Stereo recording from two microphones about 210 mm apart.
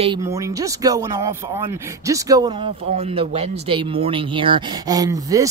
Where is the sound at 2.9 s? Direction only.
30° right (ahead or behind).